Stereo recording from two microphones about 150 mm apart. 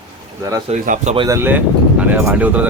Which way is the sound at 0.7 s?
50° right (ahead or behind).